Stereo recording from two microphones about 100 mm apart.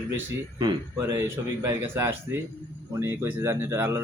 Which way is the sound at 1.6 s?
25° right (ahead or behind).